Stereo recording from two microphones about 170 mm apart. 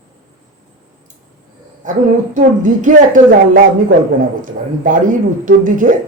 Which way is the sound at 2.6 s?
50° right (ahead or behind).